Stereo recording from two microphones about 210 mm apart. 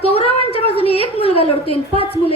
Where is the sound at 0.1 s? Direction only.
30° left (ahead or behind).